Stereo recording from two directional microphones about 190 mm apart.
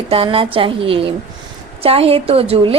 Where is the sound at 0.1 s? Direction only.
30° right (ahead or behind).